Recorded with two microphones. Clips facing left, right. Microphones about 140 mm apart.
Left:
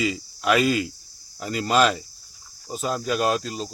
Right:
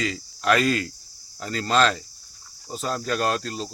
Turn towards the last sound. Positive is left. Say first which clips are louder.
# left 2 dB
turn(degrees=5)  # may be behind; listen again after turning